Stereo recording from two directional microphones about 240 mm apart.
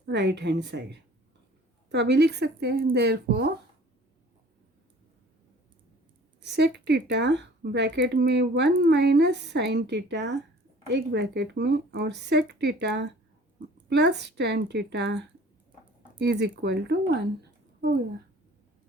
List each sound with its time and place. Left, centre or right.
0.0 s speech: right
6.4 s speech: right